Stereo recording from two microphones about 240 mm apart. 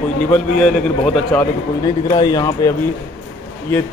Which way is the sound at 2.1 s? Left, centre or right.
Centre.